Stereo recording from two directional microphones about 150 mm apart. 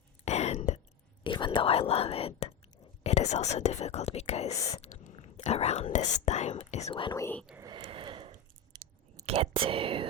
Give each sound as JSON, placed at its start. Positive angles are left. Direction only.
{"t": 0.3, "sound": "whispering", "side_deg": 45}
{"t": 1.2, "sound": "speech", "side_deg": 35}
{"t": 4.5, "sound": "speech", "side_deg": 20}
{"t": 4.8, "sound": "speech", "side_deg": 50}
{"t": 6.9, "sound": "speech", "side_deg": 35}
{"t": 7.2, "sound": "speech", "side_deg": 15}
{"t": 7.6, "sound": "a sound", "side_deg": -30}
{"t": 8.7, "sound": "clicking", "side_deg": -30}
{"t": 9.2, "sound": "speech", "side_deg": -40}